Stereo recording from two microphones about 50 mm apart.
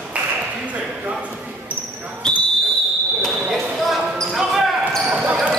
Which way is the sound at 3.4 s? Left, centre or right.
Centre.